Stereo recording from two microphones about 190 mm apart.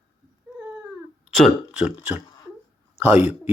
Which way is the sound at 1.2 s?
Centre (ahead or behind).